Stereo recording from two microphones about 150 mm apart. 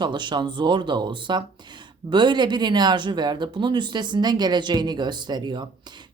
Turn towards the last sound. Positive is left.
turn(degrees=-30)  # may be behind; listen again after turning